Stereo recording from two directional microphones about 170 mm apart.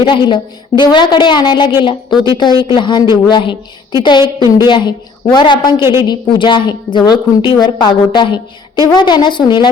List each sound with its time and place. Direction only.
0.0 s a woman's voice: 30° left (ahead or behind)
5.8 s a woman's voice: 15° right (ahead or behind)
6.1 s a woman's voice: 25° left (ahead or behind)